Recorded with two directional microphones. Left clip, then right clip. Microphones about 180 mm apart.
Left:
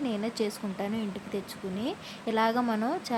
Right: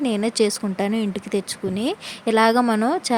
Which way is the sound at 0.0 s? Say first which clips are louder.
Right 11 dB; 50° right (ahead or behind).